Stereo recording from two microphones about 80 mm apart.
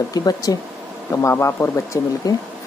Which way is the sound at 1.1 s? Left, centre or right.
Left.